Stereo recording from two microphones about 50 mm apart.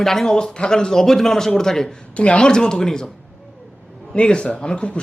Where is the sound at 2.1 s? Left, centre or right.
Left.